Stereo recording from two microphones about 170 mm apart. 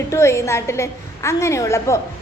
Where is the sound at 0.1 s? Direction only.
15° left (ahead or behind).